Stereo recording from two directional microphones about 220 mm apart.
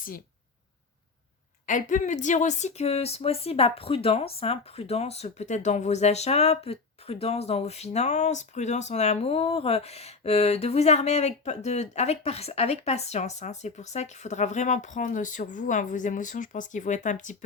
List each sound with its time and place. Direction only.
1.6 s speech: 35° left (ahead or behind)